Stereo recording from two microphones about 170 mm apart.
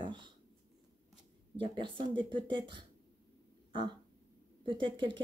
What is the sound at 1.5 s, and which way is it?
Speech, 30° right (ahead or behind).